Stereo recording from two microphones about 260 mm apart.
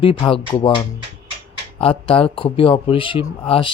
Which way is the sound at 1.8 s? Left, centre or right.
Left.